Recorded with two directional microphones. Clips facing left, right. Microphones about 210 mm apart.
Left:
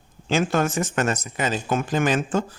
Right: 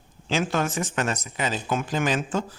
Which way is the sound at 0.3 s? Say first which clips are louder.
Left 3 dB; 50° left (ahead or behind).